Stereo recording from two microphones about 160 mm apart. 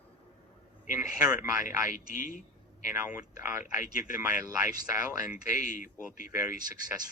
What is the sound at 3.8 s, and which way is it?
Speech, 55° left (ahead or behind).